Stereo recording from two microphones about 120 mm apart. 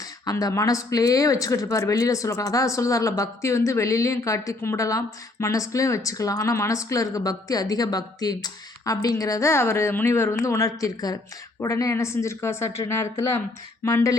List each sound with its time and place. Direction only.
0.0 s speech: 30° left (ahead or behind)